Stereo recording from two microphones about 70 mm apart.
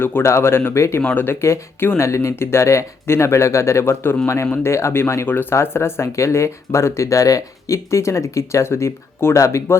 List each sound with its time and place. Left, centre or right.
0.0 s speech: left